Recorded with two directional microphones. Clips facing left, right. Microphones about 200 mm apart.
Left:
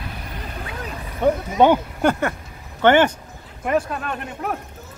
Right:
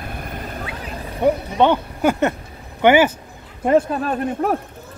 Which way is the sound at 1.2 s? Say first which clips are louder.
Even; 15° right (ahead or behind).